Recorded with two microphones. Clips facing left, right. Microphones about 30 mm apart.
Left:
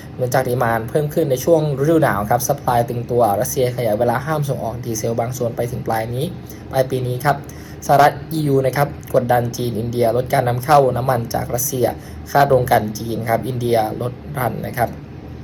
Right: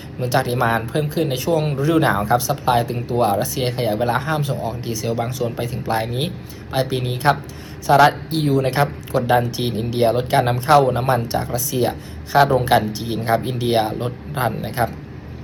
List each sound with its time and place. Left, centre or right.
0.3 s speech: right
1.5 s speech: right
1.8 s speech: right
5.1 s speech: right
8.5 s speech: right
12.4 s a woman's voice: centre
12.6 s speech: right